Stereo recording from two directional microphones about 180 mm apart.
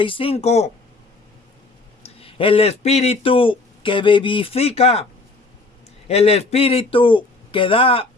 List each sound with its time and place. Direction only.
0.0 s speech: 30° left (ahead or behind)
2.0 s speech: 30° left (ahead or behind)
6.1 s speech: 35° left (ahead or behind)